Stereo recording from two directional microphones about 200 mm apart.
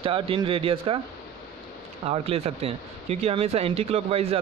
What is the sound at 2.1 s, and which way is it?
Speech, 30° right (ahead or behind).